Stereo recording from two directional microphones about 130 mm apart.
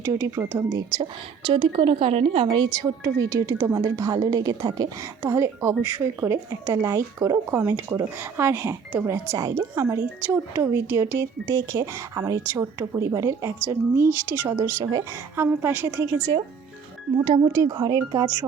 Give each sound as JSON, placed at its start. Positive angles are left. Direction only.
{"t": 0.0, "sound": "speech", "side_deg": -20}
{"t": 1.5, "sound": "speech", "side_deg": -40}
{"t": 2.8, "sound": "speech", "side_deg": -30}
{"t": 5.3, "sound": "speech", "side_deg": -20}
{"t": 17.2, "sound": "speech", "side_deg": -30}